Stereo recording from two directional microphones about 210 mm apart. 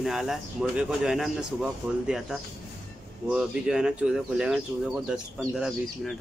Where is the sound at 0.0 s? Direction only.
Centre (ahead or behind).